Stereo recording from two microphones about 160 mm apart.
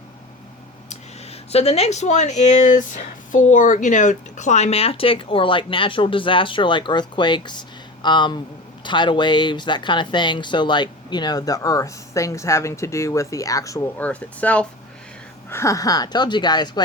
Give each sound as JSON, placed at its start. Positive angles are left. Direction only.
{"t": 0.9, "sound": "speech", "side_deg": 40}